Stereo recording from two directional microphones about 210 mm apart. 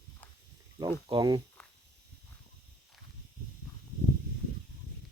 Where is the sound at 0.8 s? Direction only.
20° right (ahead or behind).